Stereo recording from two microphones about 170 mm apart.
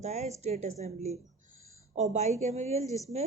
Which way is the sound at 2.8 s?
20° left (ahead or behind).